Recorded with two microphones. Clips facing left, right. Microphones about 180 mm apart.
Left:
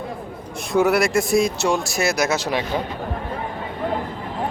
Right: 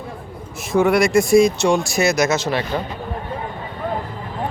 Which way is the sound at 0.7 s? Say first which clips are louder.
Right 2 dB; centre (ahead or behind).